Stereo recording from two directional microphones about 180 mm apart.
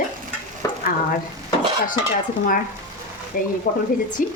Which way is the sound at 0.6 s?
15° left (ahead or behind).